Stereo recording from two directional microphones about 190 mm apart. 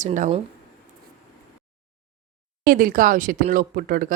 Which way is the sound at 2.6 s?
50° right (ahead or behind).